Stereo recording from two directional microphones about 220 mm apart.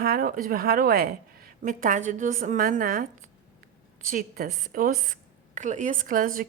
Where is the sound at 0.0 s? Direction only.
40° right (ahead or behind).